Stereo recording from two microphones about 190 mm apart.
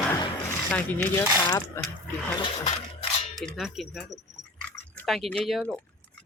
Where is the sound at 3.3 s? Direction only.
Centre (ahead or behind).